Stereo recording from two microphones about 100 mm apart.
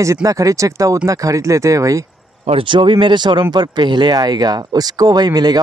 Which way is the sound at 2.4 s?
60° right (ahead or behind).